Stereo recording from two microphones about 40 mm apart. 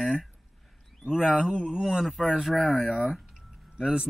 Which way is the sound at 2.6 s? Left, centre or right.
Left.